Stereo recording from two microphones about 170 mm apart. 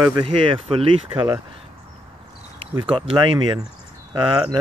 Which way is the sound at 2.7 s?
25° right (ahead or behind).